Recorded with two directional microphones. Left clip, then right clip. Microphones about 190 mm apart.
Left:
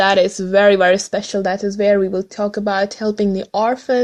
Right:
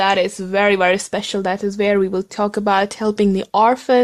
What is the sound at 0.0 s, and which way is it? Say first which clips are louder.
Speech: left 3 dB; centre (ahead or behind).